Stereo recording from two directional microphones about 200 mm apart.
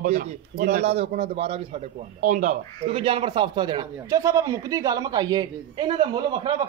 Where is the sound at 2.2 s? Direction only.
40° right (ahead or behind).